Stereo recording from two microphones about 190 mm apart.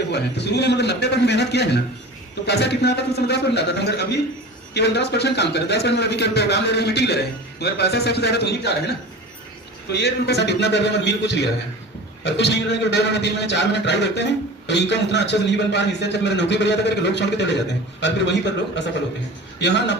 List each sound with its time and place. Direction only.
0.1 s a man's voice: 60° left (ahead or behind)
9.9 s a man's voice: 60° left (ahead or behind)